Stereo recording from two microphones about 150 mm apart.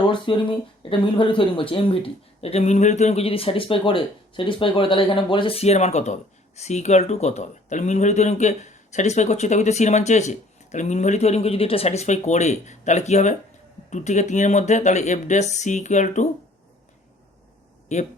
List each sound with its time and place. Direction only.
0.0 s speech: 35° left (ahead or behind); by 16.3 s 55° left (ahead or behind)
17.9 s speech: 50° left (ahead or behind)